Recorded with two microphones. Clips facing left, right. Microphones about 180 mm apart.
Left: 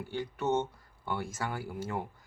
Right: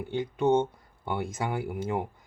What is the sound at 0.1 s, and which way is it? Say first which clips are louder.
Speech: right 7 dB; 20° right (ahead or behind).